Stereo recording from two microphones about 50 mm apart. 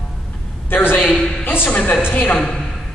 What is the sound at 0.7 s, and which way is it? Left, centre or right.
Speech, left.